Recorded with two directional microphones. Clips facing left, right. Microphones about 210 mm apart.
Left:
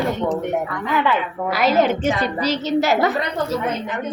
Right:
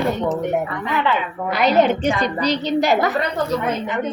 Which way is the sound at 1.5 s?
Centre (ahead or behind).